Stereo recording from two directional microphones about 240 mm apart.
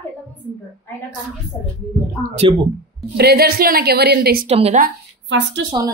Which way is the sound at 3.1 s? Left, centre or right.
Right.